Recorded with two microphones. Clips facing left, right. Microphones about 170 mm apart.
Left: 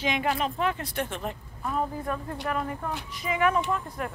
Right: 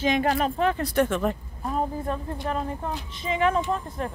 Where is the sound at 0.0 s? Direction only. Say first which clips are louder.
Right 4 dB; 40° right (ahead or behind).